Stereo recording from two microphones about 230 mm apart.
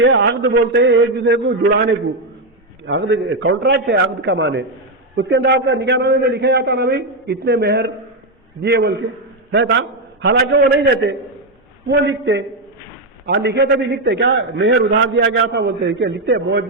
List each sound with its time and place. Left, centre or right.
0.0 s a man's voice: right
11.9 s a man's voice: right